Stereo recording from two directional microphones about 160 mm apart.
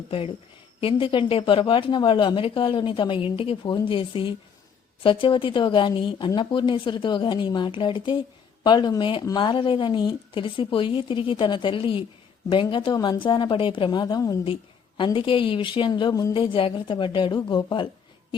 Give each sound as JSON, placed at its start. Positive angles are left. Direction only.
{"t": 0.8, "sound": "a woman's voice", "side_deg": 35}